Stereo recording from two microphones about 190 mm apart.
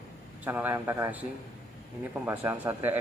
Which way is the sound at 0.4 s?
10° right (ahead or behind).